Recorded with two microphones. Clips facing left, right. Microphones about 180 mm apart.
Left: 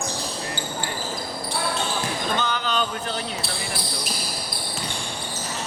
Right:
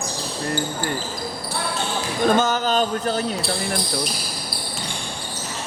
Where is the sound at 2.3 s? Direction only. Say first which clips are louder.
Right 9 dB; 45° right (ahead or behind).